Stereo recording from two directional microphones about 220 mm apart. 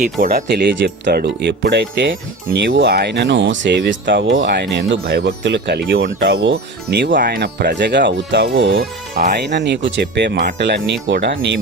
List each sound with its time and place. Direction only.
0.0 s speech: 40° right (ahead or behind)